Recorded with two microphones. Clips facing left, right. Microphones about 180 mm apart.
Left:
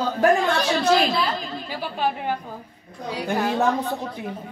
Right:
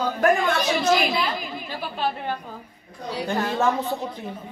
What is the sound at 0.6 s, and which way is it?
Speech, 10° right (ahead or behind).